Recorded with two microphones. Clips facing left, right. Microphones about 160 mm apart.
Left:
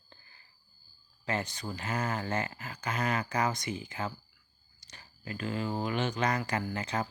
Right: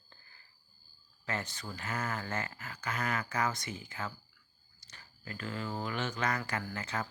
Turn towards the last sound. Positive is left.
turn(degrees=20)  # may be behind; listen again after turning